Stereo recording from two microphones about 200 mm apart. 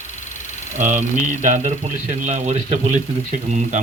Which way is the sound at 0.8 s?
40° right (ahead or behind).